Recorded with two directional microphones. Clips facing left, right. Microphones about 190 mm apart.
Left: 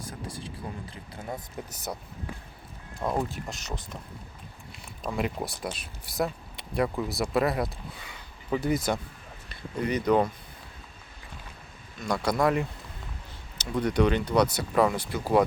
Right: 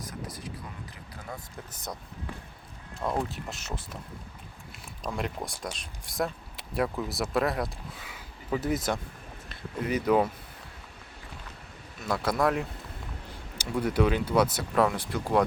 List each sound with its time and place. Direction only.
0.0 s vehicle: 30° left (ahead or behind)
1.1 s speech: 25° left (ahead or behind)
3.0 s speech: centre (ahead or behind)
5.0 s speech: 5° left (ahead or behind)
11.9 s speech: 5° right (ahead or behind)